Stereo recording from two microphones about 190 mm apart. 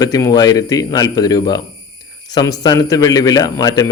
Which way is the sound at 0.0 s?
20° left (ahead or behind).